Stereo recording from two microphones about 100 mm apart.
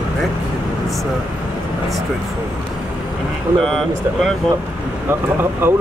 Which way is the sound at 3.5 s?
5° left (ahead or behind).